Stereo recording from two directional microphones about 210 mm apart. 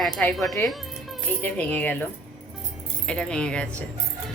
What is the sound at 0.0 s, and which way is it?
A woman's voice, 5° left (ahead or behind).